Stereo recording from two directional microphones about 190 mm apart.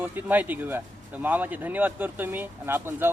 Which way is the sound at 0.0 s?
10° right (ahead or behind).